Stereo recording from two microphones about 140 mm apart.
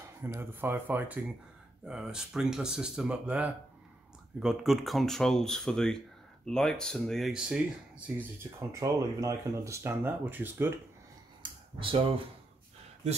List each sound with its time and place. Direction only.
0.2 s speech: 15° right (ahead or behind)
8.5 s speech: 20° right (ahead or behind)
11.4 s a sound: 40° right (ahead or behind)